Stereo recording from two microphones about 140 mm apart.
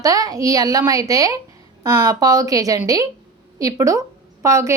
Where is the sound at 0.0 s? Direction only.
25° right (ahead or behind).